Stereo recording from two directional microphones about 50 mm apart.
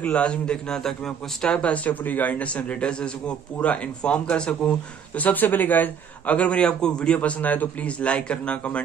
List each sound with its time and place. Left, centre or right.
0.0 s a man's voice: left
1.6 s a man's voice: left
5.2 s a man's voice: left; by 7.2 s centre
7.2 s a man's voice: left